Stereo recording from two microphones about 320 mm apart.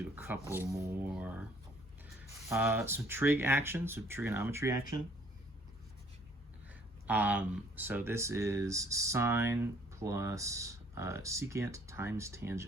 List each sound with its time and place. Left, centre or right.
0.2 s speech: centre
2.5 s speech: centre
7.1 s speech: centre